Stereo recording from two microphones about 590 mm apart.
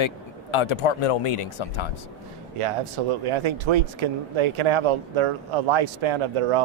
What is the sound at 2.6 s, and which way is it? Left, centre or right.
Speech, right.